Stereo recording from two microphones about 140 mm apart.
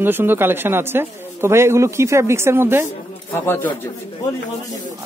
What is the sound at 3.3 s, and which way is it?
Speech, 15° left (ahead or behind).